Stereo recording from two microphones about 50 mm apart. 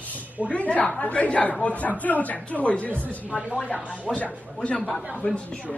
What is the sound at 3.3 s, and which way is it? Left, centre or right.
Speech, right.